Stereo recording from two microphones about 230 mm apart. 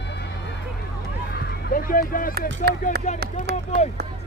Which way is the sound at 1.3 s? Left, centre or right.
Left.